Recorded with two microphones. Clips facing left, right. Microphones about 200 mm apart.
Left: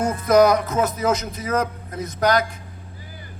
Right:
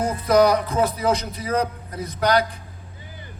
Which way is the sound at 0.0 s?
35° right (ahead or behind).